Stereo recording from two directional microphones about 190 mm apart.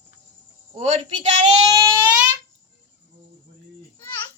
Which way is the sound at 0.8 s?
35° right (ahead or behind).